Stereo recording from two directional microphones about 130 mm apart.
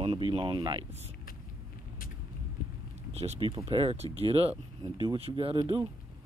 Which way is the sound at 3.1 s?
45° right (ahead or behind).